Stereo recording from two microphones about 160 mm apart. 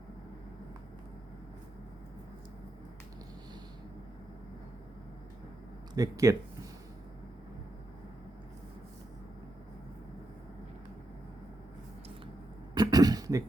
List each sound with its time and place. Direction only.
5.9 s speech: 20° right (ahead or behind)
12.7 s cough: 25° right (ahead or behind)